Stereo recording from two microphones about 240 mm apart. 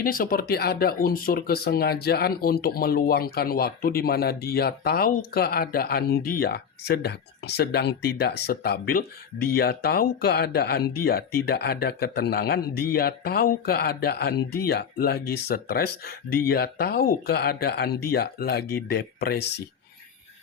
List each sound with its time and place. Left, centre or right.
0.0 s speech: left